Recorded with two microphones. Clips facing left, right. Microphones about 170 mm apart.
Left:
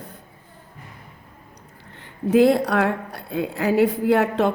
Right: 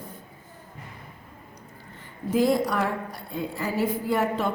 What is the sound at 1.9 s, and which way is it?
Speech, 70° left (ahead or behind).